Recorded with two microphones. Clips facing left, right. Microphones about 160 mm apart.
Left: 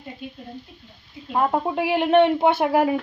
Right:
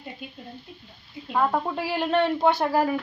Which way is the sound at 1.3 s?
20° left (ahead or behind).